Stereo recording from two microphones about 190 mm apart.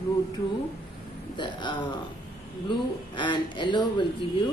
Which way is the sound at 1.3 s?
25° left (ahead or behind).